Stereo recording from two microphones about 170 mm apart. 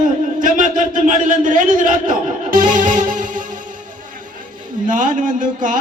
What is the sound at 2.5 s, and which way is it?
Music, 50° right (ahead or behind).